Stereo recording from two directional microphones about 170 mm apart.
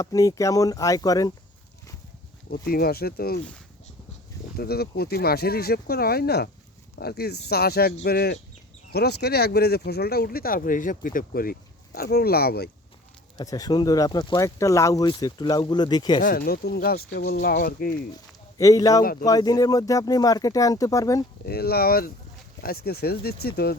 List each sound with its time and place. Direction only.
0.0 s speech: 20° left (ahead or behind)
2.5 s speech: 60° left (ahead or behind)
4.5 s speech: 65° left (ahead or behind)
13.3 s speech: 20° left (ahead or behind)
16.2 s speech: 60° left (ahead or behind)
18.1 s speech: 20° left (ahead or behind)
21.4 s speech: 65° left (ahead or behind)